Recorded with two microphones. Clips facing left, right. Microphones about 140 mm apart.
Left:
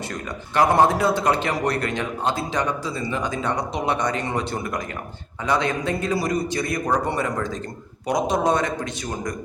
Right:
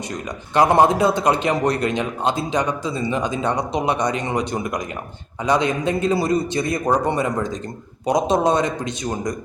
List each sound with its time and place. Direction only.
0.1 s a man's voice: 20° right (ahead or behind)